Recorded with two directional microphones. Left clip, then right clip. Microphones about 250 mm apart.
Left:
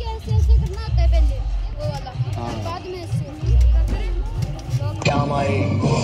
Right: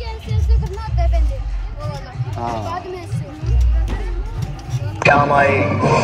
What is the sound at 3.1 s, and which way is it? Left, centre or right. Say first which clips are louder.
Music: right 1 dB; centre.